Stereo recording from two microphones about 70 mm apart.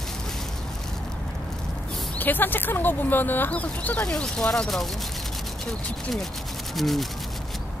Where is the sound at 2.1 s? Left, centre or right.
Left.